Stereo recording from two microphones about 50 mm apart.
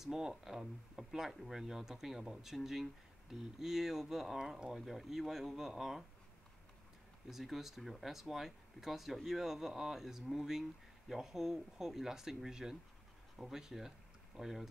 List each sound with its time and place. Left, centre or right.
0.0 s speech: centre
7.2 s speech: centre